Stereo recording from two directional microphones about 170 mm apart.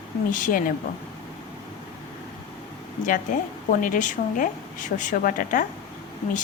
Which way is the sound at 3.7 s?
50° left (ahead or behind).